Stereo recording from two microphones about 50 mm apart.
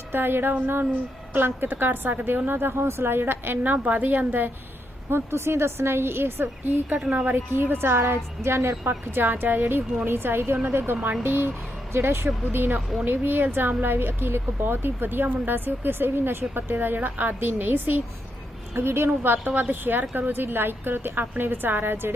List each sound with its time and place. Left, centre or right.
0.1 s a woman's voice: right
5.1 s a woman's voice: right
7.0 s a woman's voice: right
7.3 s a woman's voice: right
8.4 s speech: right
8.8 s a woman's voice: right
12.5 s a woman's voice: right
18.7 s a woman's voice: right